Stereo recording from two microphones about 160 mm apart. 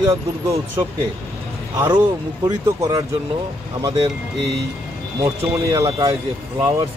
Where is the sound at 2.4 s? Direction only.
20° right (ahead or behind).